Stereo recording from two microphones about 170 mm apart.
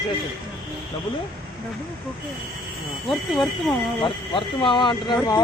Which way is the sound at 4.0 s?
30° left (ahead or behind).